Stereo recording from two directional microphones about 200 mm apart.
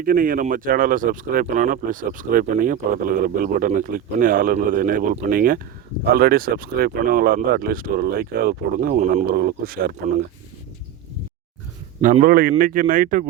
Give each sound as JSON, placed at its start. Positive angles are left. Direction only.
{"t": 0.0, "sound": "speech", "side_deg": -45}
{"t": 12.0, "sound": "speech", "side_deg": -45}